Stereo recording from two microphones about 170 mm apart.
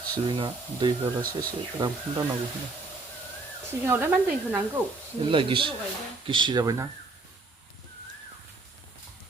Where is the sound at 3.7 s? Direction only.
10° right (ahead or behind).